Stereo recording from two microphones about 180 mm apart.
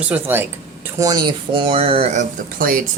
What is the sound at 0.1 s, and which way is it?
Speech, 10° right (ahead or behind).